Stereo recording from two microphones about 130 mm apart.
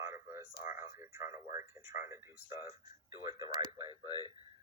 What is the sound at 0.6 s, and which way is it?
Speech, 20° right (ahead or behind).